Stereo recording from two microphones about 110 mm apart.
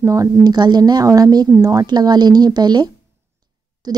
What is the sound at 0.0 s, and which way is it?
Speech, 30° right (ahead or behind).